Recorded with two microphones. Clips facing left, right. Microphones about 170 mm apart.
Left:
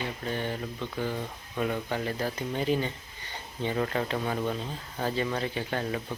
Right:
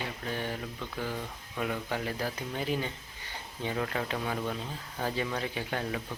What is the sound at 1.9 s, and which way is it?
Speech, 5° right (ahead or behind).